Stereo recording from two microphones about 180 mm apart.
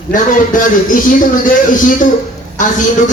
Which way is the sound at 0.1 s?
45° left (ahead or behind).